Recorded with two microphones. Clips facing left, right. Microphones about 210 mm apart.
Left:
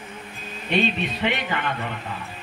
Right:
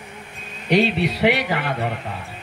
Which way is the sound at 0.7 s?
85° right.